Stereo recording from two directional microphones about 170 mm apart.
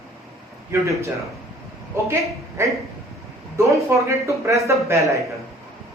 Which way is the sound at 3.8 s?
20° right (ahead or behind).